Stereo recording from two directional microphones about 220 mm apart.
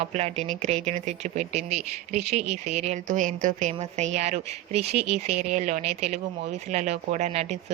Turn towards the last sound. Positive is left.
turn(degrees=-30)  # may be behind; listen again after turning